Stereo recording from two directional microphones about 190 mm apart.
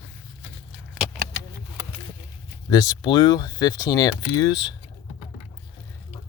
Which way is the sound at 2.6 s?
20° left (ahead or behind).